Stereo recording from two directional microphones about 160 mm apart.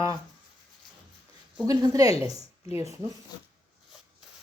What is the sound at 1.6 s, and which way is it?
Speech, 20° right (ahead or behind).